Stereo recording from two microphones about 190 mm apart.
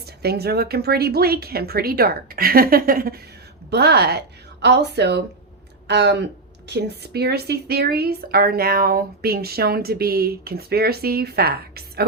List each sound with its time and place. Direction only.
0.0 s a woman's voice: 55° right (ahead or behind)